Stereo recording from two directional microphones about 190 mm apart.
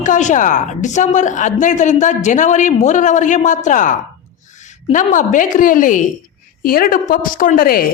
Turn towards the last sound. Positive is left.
turn(degrees=50)  # may be behind; listen again after turning